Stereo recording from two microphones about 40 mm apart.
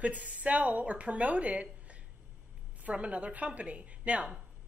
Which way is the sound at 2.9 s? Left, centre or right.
Right.